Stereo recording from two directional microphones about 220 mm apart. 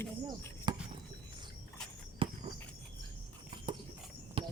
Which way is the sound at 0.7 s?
20° right (ahead or behind).